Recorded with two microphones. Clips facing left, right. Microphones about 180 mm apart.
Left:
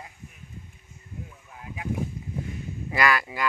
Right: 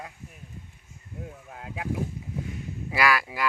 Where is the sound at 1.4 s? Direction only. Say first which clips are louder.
Right 2 dB; 70° right (ahead or behind).